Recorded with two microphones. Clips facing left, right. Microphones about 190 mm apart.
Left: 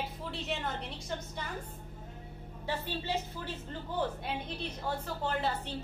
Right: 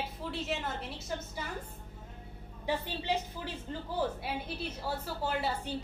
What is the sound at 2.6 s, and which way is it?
A woman's voice, 15° right (ahead or behind).